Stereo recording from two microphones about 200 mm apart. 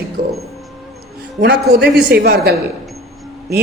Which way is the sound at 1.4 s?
55° right (ahead or behind).